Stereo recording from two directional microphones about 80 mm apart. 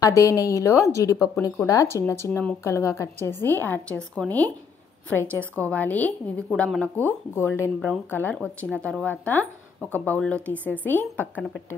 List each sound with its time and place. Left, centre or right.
0.0 s a woman's voice: left
3.3 s speech: left
4.2 s speech: centre
5.2 s a woman's voice: right
5.6 s speech: centre
8.4 s speech: centre